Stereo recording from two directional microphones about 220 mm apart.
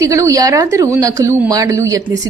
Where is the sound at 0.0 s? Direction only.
15° right (ahead or behind).